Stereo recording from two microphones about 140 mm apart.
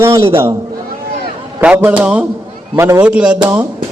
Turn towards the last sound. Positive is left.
turn(degrees=-10)  # may be behind; listen again after turning